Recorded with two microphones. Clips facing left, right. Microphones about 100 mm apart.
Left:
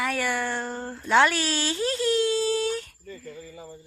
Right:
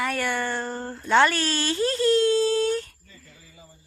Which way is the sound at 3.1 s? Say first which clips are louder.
Left 12 dB; 60° left (ahead or behind).